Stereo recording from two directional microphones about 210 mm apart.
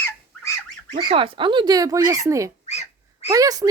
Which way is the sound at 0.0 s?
15° left (ahead or behind).